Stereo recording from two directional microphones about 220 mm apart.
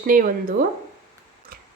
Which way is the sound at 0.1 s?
40° right (ahead or behind).